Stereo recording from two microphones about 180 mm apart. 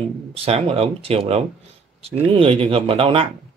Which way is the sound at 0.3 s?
35° right (ahead or behind).